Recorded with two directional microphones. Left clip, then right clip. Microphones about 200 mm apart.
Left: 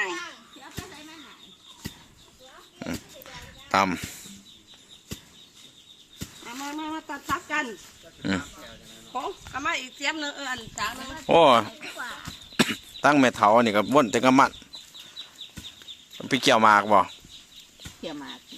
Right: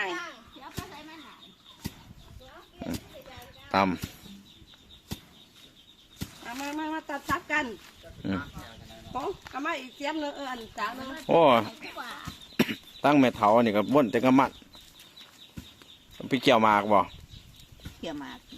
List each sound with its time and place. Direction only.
2.7 s pig: 5° left (ahead or behind)
3.7 s speech: 5° left (ahead or behind)
6.7 s a sound: 30° right (ahead or behind)
8.2 s speech: 10° left (ahead or behind)
9.5 s speech: 35° right (ahead or behind)
11.3 s speech: 5° left (ahead or behind)
16.1 s speech: 5° left (ahead or behind)
18.0 s speech: 10° right (ahead or behind)